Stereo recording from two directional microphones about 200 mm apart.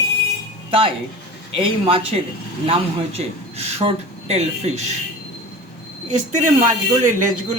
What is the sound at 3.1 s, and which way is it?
A man's voice, 30° right (ahead or behind).